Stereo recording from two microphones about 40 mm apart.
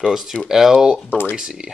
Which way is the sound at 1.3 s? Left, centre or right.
Right.